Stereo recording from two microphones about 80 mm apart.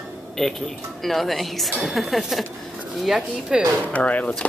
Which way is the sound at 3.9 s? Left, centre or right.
Centre.